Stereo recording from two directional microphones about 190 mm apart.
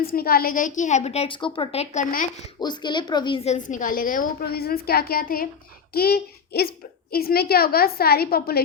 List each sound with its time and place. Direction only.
0.0 s a woman's voice: 50° left (ahead or behind)
2.6 s a woman's voice: 25° left (ahead or behind); by 8.6 s 55° left (ahead or behind)